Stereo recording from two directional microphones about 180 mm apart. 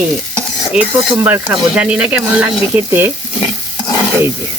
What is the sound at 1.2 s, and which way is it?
Speech, 10° right (ahead or behind).